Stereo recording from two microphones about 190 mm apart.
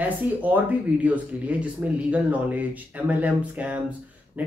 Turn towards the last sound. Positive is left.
turn(degrees=-10)  # may be behind; listen again after turning